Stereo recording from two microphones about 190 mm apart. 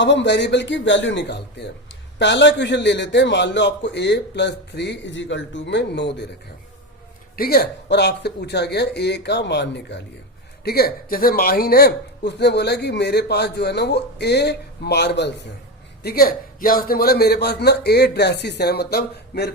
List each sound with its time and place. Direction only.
0.0 s a man's voice: 70° left (ahead or behind)
7.3 s speech: 55° left (ahead or behind)
16.0 s speech: 50° left (ahead or behind)